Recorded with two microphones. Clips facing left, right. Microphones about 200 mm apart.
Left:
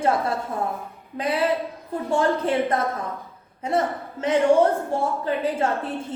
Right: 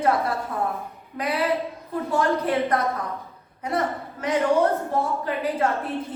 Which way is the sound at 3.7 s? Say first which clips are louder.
Left 2 dB; 25° left (ahead or behind).